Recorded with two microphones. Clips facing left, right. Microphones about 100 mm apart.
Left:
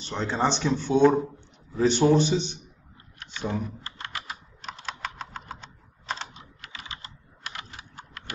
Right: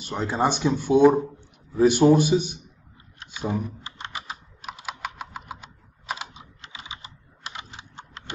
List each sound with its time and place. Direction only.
0.0 s speech: 10° right (ahead or behind)
3.3 s computer keyboard: 10° right (ahead or behind)
4.6 s computer keyboard: 10° right (ahead or behind)
6.6 s computer keyboard: 20° right (ahead or behind)